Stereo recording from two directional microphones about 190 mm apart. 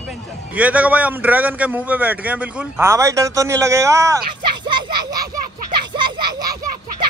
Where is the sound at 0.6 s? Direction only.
10° right (ahead or behind).